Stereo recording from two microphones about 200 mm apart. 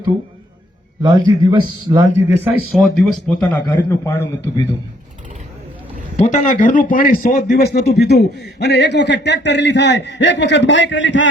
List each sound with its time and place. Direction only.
1.0 s a man's voice: 20° right (ahead or behind)
2.3 s speech: 5° right (ahead or behind)
3.7 s a man's voice: 10° left (ahead or behind)
6.1 s a man's voice: 35° left (ahead or behind); by 11.3 s 65° left (ahead or behind)